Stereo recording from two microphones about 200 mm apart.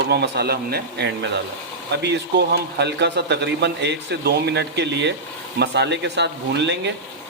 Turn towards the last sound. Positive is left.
turn(degrees=-60)  # may be behind; listen again after turning